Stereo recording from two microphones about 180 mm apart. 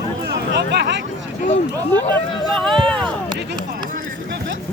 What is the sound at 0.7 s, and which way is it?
Speech, 70° right (ahead or behind).